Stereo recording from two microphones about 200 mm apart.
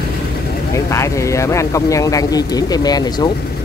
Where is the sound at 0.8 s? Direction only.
15° left (ahead or behind).